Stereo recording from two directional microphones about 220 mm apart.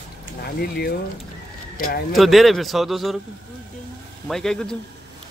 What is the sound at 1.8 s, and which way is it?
Speech, 40° left (ahead or behind).